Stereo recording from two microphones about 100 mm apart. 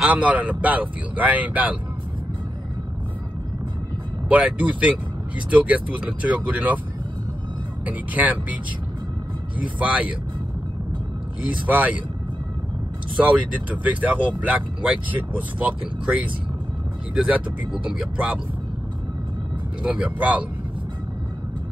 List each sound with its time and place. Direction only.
0.0 s speech: 15° right (ahead or behind)
4.3 s speech: 15° right (ahead or behind)
7.8 s speech: 15° right (ahead or behind)
9.6 s speech: 15° right (ahead or behind)
11.6 s speech: 15° right (ahead or behind)
13.2 s speech: 15° right (ahead or behind)
17.1 s speech: 10° right (ahead or behind)
19.8 s speech: 15° right (ahead or behind)